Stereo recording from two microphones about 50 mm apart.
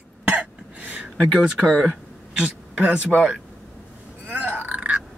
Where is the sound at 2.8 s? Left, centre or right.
Right.